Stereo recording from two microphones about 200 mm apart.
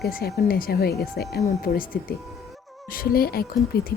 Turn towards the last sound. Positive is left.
turn(degrees=50)  # may be behind; listen again after turning